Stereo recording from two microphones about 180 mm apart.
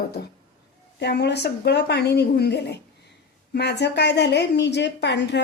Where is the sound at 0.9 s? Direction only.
70° left (ahead or behind).